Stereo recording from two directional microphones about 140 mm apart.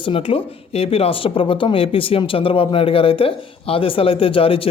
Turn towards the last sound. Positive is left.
turn(degrees=40)  # may be behind; listen again after turning